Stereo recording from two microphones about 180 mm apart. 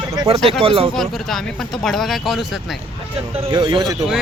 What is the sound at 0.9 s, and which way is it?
Speech, centre (ahead or behind).